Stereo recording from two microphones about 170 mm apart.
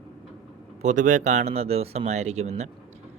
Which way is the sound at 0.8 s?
45° right (ahead or behind).